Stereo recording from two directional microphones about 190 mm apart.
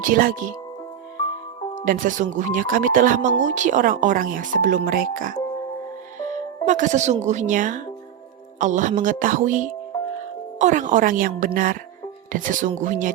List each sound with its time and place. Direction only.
0.0 s speech: 45° right (ahead or behind)
1.8 s speech: 45° right (ahead or behind)